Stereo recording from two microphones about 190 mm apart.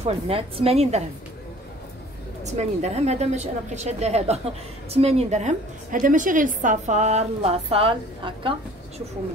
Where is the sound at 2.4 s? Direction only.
35° right (ahead or behind).